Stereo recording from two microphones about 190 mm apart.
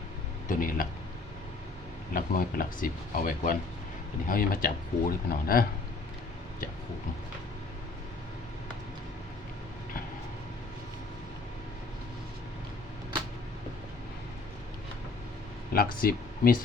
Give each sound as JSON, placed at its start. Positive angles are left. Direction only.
{"t": 0.4, "sound": "speech", "side_deg": 45}
{"t": 2.1, "sound": "speech", "side_deg": 50}
{"t": 15.7, "sound": "speech", "side_deg": 50}